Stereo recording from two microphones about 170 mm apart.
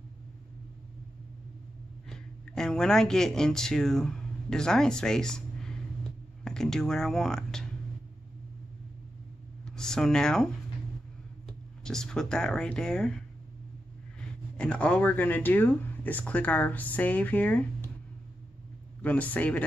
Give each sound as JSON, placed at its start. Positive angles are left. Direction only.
{"t": 2.0, "sound": "speech", "side_deg": 5}
{"t": 9.7, "sound": "speech", "side_deg": 5}
{"t": 11.8, "sound": "speech", "side_deg": 5}
{"t": 14.6, "sound": "speech", "side_deg": 5}
{"t": 18.9, "sound": "speech", "side_deg": 10}